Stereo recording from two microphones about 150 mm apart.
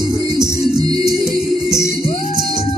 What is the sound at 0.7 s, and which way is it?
Music, 25° right (ahead or behind).